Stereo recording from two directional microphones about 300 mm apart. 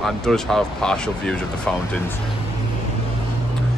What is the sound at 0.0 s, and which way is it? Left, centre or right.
A man's voice, centre.